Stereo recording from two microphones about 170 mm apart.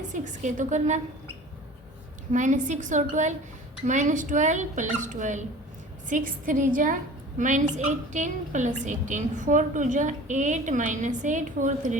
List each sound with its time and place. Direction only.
0.1 s a woman's voice: 45° right (ahead or behind)
2.3 s a woman's voice: 45° right (ahead or behind)